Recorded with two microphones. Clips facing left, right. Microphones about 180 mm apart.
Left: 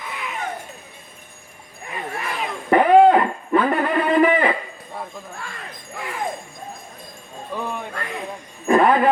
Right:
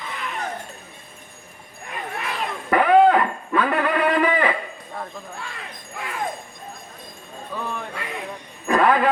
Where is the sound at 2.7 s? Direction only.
25° left (ahead or behind).